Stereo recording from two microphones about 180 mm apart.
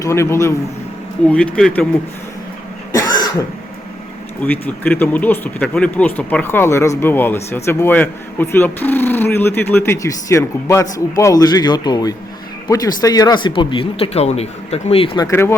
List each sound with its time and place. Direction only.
0.0 s speech: 15° left (ahead or behind)
4.4 s speech: 10° left (ahead or behind); by 15.3 s 30° left (ahead or behind)
15.3 s speech: 15° left (ahead or behind)